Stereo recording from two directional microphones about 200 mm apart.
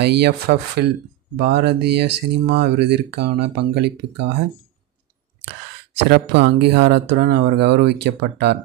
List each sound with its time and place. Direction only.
0.0 s speech: 55° right (ahead or behind)
6.0 s speech: 55° right (ahead or behind)